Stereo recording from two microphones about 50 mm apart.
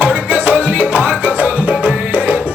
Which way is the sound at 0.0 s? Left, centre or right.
Right.